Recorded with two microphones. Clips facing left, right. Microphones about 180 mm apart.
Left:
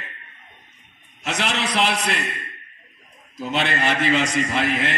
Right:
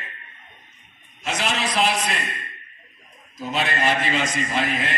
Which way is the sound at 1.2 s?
70° left (ahead or behind).